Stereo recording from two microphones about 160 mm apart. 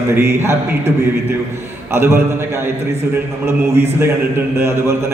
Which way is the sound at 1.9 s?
15° right (ahead or behind).